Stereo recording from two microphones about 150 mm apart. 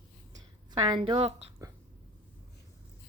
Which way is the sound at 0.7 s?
30° right (ahead or behind).